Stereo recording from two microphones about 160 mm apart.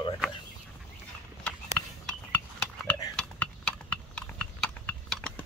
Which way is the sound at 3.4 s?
5° left (ahead or behind).